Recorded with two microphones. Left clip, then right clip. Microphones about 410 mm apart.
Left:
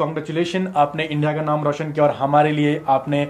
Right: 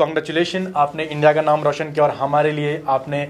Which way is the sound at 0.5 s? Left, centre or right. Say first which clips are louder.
Even; right.